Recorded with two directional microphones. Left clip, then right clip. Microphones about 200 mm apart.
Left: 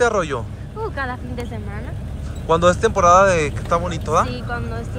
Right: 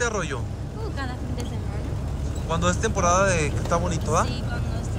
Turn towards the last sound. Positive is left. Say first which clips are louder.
# left 5 dB
turn(degrees=-10)  # may be behind; listen again after turning